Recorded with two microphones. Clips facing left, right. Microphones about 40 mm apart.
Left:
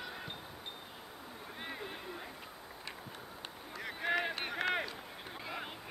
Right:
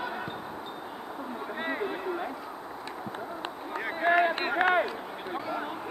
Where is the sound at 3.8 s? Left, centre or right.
Right.